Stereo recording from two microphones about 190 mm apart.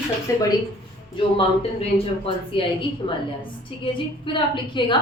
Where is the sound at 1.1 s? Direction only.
30° left (ahead or behind).